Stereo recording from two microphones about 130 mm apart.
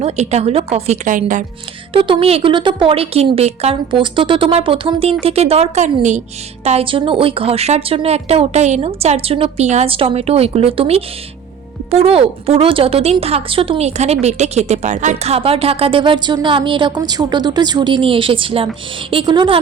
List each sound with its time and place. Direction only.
0.0 s speech: 55° right (ahead or behind)
1.0 s a woman's voice: 80° right
1.9 s a woman's voice: 40° right (ahead or behind); by 6.2 s 65° right (ahead or behind)
6.7 s a woman's voice: 45° right (ahead or behind)
9.9 s a woman's voice: 45° right (ahead or behind)
17.0 s a woman's voice: 30° right (ahead or behind)